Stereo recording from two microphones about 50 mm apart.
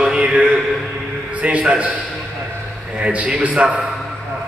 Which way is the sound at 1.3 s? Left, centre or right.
Right.